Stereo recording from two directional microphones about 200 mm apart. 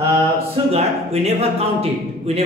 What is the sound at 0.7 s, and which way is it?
Speech, 30° right (ahead or behind).